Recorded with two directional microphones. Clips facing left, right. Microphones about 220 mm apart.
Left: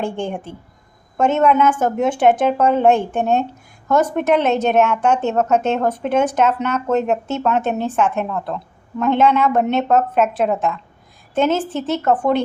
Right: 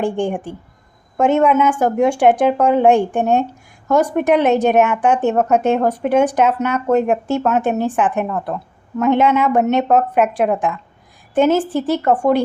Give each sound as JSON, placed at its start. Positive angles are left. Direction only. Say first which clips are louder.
{"t": 0.0, "sound": "speech", "louder": "right 4 dB", "side_deg": -15}